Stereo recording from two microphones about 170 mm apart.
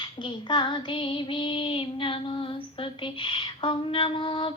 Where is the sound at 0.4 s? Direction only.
25° left (ahead or behind).